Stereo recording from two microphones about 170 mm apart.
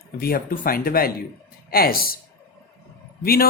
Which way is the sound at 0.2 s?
60° left (ahead or behind).